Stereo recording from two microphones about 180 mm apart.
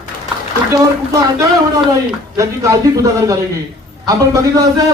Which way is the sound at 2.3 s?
20° right (ahead or behind).